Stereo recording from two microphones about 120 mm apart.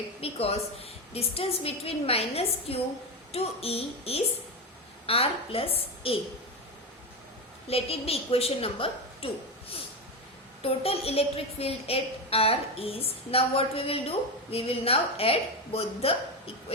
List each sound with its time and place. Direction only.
0.2 s a woman's voice: 55° left (ahead or behind)
7.7 s a woman's voice: 55° left (ahead or behind)